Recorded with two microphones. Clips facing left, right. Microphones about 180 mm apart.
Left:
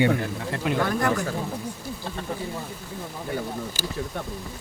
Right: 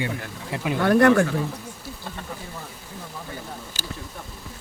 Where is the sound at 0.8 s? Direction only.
70° right (ahead or behind).